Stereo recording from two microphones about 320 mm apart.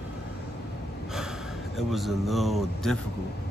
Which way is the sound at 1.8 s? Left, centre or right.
Centre.